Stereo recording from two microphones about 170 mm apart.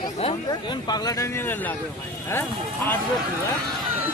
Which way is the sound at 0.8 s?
25° left (ahead or behind).